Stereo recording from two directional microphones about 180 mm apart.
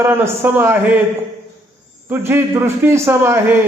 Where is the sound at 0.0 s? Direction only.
10° right (ahead or behind).